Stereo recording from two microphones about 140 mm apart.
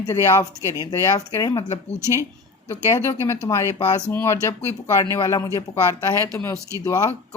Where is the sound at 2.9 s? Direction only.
20° left (ahead or behind).